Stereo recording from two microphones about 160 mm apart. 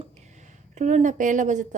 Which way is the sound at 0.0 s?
45° right (ahead or behind).